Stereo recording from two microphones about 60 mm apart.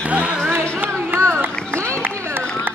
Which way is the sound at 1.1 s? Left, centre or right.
Right.